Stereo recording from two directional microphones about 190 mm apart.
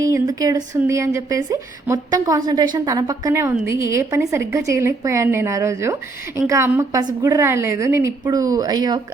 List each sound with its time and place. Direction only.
0.0 s a woman's voice: 20° right (ahead or behind)